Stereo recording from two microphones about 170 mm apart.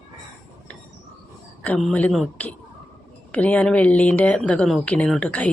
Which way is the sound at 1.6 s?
5° left (ahead or behind).